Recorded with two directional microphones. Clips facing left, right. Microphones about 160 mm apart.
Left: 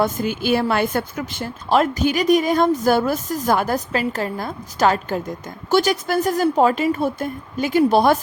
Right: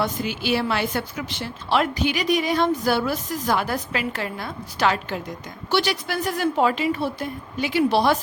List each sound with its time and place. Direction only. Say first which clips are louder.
0.0 s a woman's voice: left 5 dB; 50° left (ahead or behind)